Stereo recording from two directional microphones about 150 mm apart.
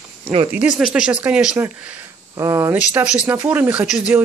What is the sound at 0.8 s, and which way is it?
Speech, 5° right (ahead or behind).